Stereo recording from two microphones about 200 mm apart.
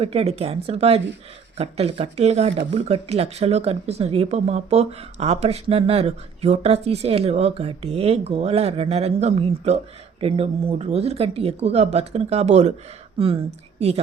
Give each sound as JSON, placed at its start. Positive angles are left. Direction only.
{"t": 0.0, "sound": "a woman's voice", "side_deg": -30}